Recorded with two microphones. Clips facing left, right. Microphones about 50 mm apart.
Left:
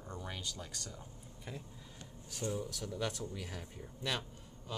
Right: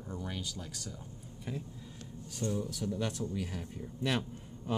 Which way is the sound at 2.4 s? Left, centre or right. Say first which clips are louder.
Right 4 dB; centre.